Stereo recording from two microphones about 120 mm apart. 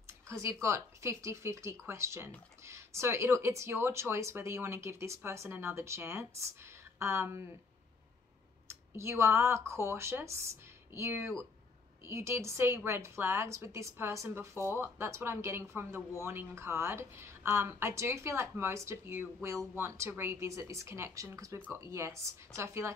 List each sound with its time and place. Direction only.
0.0 s speech: 25° right (ahead or behind)
8.6 s speech: 20° right (ahead or behind)